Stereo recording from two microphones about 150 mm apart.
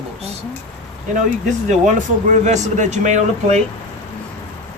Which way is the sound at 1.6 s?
55° right (ahead or behind).